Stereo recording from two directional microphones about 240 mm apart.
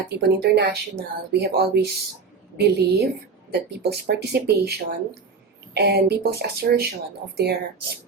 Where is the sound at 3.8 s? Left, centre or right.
Right.